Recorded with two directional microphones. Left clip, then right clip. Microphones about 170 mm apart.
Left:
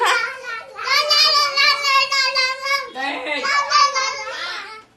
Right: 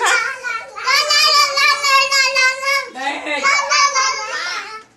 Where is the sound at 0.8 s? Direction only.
20° right (ahead or behind).